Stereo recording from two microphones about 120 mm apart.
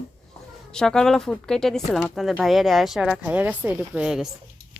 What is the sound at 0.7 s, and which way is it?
Speech, 5° left (ahead or behind).